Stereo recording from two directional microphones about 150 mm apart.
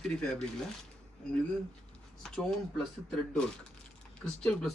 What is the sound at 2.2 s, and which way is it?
Speech, 5° left (ahead or behind).